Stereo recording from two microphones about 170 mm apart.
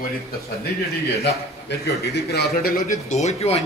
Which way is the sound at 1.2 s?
75° left (ahead or behind).